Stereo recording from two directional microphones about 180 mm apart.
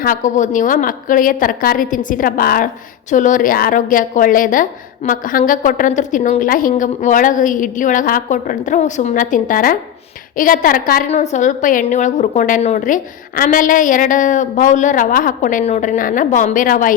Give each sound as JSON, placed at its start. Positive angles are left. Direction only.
{"t": 0.0, "sound": "a woman's voice", "side_deg": 45}
{"t": 11.1, "sound": "a woman's voice", "side_deg": 40}